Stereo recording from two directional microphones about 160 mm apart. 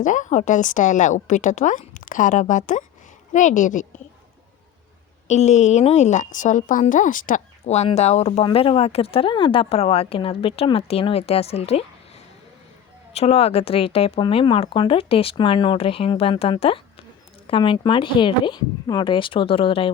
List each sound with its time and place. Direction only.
0.0 s a woman's voice: 50° left (ahead or behind)
5.3 s a woman's voice: 45° left (ahead or behind)